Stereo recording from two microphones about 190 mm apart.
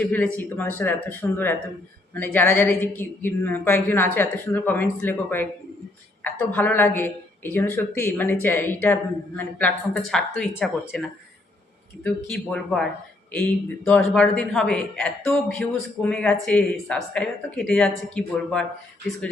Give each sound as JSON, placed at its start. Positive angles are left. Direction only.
{"t": 0.0, "sound": "a woman's voice", "side_deg": 10}
{"t": 12.0, "sound": "a man's voice", "side_deg": 5}